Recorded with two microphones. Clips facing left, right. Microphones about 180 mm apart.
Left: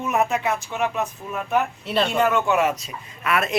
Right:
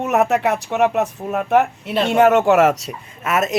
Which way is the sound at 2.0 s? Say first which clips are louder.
Right 9 dB; 75° right (ahead or behind).